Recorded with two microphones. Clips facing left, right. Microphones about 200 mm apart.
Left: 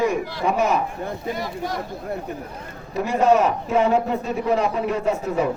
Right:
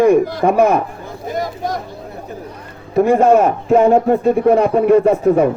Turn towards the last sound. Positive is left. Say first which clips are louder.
# right 10 dB
turn(degrees=-55)  # may be behind; listen again after turning